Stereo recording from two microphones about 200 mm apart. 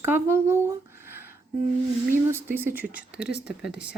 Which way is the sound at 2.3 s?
10° right (ahead or behind).